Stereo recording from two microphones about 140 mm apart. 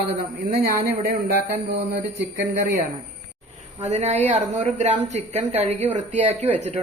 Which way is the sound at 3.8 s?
55° right (ahead or behind).